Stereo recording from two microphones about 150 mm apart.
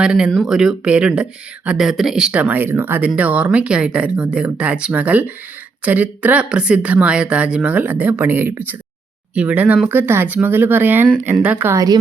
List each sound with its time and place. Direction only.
0.0 s speech: 5° right (ahead or behind); by 11.9 s 25° right (ahead or behind)